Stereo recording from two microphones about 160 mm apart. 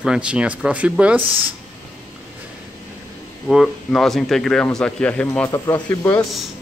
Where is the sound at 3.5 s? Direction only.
Centre (ahead or behind); by 6.3 s 20° left (ahead or behind).